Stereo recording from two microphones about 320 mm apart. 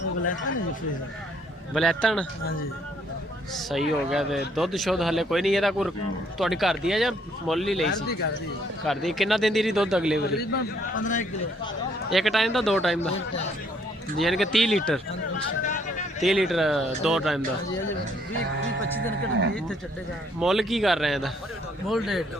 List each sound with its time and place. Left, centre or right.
1.7 s speech: centre
3.7 s speech: centre
8.9 s speech: centre
10.5 s a man's voice: left
12.1 s speech: centre
14.2 s speech: centre
15.6 s a sound: left
16.2 s speech: centre
18.9 s speech: right
20.4 s speech: centre